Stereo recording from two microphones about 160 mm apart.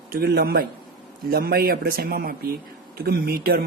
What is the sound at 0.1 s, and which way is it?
Speech, 75° right (ahead or behind).